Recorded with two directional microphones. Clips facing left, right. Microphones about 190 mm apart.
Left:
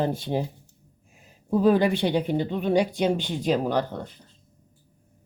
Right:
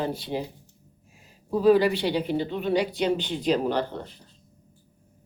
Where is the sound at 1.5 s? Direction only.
50° left (ahead or behind).